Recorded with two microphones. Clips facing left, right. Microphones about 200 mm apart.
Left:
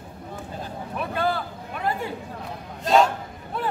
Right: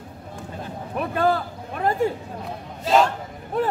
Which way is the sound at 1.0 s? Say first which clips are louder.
Right 4 dB; 45° right (ahead or behind).